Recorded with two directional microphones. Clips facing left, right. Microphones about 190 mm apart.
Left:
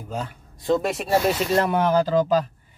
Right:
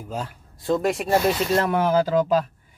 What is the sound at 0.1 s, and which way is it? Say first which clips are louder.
Speech: left 1 dB; 5° right (ahead or behind).